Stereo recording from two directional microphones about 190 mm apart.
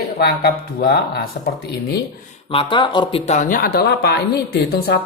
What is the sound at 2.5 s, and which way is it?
Speech, 25° left (ahead or behind).